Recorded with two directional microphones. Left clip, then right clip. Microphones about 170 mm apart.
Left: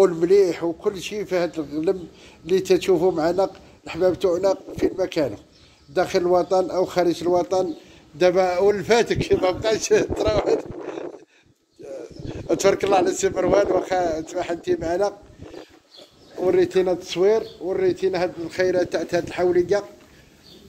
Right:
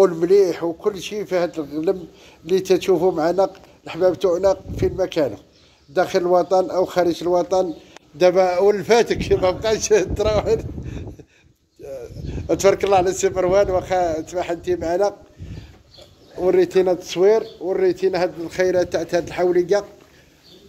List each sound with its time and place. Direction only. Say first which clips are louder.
0.0 s speech: right 2 dB; centre (ahead or behind)
11.8 s speech: right 2 dB; centre (ahead or behind)
16.4 s speech: right 3 dB; 5° right (ahead or behind)